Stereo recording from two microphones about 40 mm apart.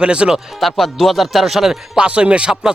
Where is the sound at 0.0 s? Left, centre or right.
Right.